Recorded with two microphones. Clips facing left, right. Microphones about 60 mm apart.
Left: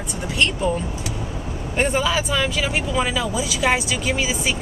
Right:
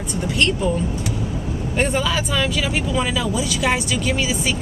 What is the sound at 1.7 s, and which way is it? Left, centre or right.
Speech, centre.